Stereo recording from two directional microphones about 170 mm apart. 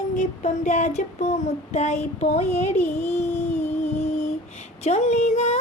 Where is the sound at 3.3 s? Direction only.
40° left (ahead or behind).